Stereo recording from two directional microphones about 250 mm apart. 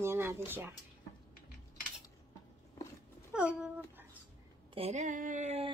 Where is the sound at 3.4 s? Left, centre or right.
Centre.